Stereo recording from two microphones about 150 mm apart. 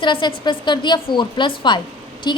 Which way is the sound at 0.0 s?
30° left (ahead or behind).